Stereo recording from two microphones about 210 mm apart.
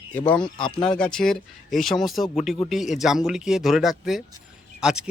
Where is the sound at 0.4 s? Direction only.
20° left (ahead or behind).